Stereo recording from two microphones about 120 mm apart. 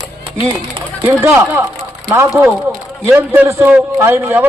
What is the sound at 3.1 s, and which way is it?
A man's voice, 20° right (ahead or behind).